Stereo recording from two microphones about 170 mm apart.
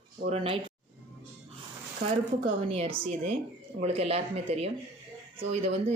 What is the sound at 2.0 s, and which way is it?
Speech, 40° right (ahead or behind).